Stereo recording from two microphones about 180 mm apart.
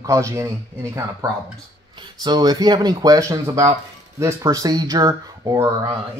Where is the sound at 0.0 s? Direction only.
15° right (ahead or behind).